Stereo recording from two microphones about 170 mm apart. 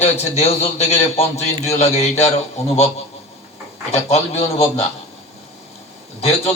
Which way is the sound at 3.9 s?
40° left (ahead or behind).